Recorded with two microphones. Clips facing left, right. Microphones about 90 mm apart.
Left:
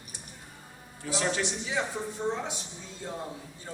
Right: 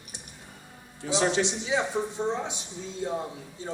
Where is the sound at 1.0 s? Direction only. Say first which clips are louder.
Right 5 dB; 20° right (ahead or behind).